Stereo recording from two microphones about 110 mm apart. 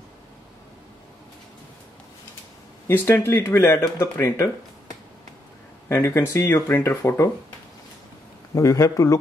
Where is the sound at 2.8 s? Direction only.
25° left (ahead or behind).